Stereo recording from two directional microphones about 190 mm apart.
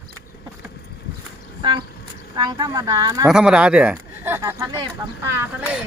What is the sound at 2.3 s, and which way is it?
Speech, 20° right (ahead or behind).